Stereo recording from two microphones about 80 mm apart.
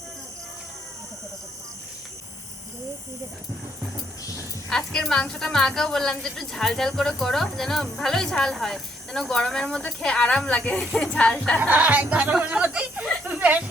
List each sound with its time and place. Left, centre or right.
4.7 s a woman's voice: centre
11.6 s speech: centre
13.2 s a sound: centre